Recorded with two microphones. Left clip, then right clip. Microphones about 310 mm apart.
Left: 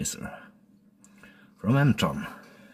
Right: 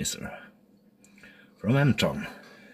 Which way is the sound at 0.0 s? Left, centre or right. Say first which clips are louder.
Right 2 dB; centre.